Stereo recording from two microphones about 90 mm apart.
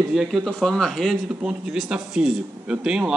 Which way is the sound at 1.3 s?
10° right (ahead or behind).